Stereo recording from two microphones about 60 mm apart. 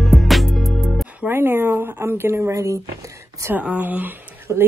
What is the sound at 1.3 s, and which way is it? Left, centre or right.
Speech, right.